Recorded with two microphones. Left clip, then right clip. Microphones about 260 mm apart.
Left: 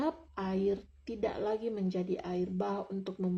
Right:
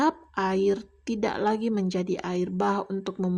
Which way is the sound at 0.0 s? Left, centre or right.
Right.